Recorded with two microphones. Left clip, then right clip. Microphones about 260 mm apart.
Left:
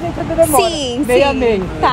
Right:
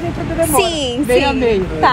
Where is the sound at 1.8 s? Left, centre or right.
Centre.